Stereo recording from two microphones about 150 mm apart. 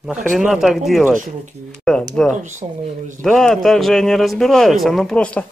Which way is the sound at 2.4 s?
55° right (ahead or behind).